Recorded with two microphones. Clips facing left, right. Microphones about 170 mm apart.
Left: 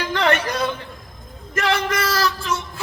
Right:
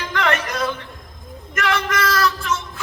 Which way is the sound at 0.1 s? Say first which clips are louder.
Left 1 dB; 30° left (ahead or behind).